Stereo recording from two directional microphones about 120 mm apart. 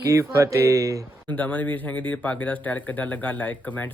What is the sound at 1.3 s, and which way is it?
Speech, 15° left (ahead or behind).